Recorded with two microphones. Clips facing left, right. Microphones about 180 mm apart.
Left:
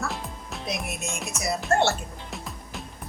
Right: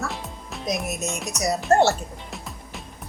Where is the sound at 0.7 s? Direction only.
40° right (ahead or behind).